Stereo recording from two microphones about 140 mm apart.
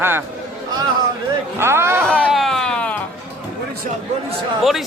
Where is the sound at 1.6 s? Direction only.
20° right (ahead or behind).